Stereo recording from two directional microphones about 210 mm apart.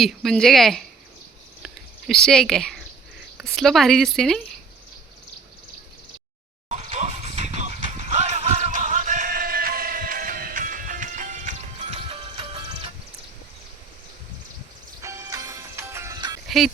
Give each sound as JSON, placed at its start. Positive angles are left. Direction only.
{"t": 0.0, "sound": "a woman's voice", "side_deg": 0}
{"t": 1.6, "sound": "a sound", "side_deg": 0}
{"t": 3.3, "sound": "a woman's voice", "side_deg": 0}
{"t": 6.7, "sound": "horse", "side_deg": -35}
{"t": 15.0, "sound": "music", "side_deg": -15}
{"t": 16.5, "sound": "a sound", "side_deg": 0}